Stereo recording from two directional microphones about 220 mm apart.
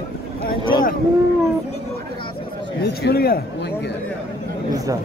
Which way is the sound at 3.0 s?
45° left (ahead or behind).